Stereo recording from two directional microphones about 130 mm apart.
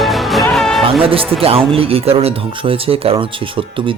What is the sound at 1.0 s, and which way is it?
Speech, 45° right (ahead or behind).